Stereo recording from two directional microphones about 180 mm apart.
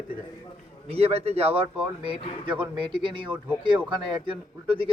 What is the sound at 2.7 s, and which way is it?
A man's voice, 30° right (ahead or behind).